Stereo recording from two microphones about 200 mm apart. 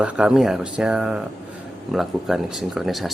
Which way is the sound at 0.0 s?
5° right (ahead or behind).